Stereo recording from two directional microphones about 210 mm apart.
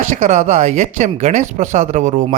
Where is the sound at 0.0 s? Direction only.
35° right (ahead or behind).